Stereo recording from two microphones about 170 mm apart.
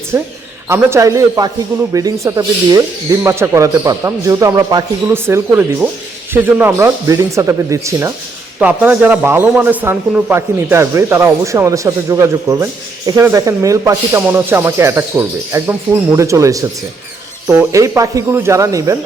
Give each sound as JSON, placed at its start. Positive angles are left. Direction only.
{"t": 0.7, "sound": "a man's voice", "side_deg": -15}